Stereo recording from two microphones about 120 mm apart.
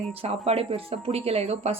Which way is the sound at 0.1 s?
55° right (ahead or behind).